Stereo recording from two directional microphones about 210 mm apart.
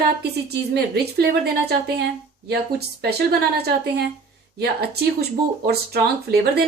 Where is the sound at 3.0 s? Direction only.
50° right (ahead or behind).